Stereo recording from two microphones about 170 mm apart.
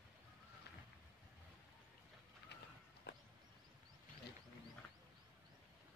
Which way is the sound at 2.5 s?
80° left.